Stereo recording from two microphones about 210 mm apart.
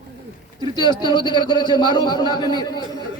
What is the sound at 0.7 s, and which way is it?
A man's voice, 20° left (ahead or behind).